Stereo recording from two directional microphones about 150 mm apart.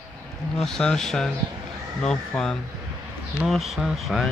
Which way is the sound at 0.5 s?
5° left (ahead or behind).